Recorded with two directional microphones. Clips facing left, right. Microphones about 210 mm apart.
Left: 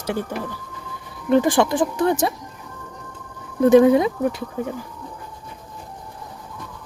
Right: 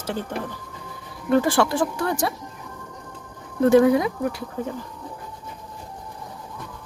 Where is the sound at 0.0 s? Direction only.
15° left (ahead or behind).